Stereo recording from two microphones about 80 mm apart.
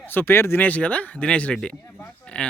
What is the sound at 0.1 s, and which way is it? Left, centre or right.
Speech, left.